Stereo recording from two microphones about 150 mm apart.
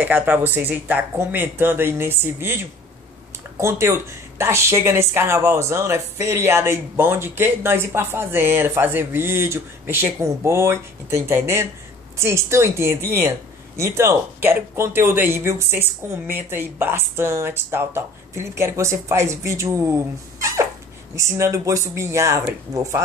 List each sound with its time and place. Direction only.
0.0 s speech: 10° right (ahead or behind)
3.6 s speech: 15° right (ahead or behind)